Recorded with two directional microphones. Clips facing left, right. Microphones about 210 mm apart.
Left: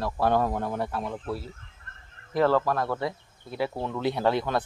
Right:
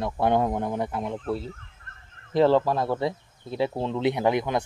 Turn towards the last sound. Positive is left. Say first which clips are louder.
# right 1 dB
turn(degrees=-15)  # may be behind; listen again after turning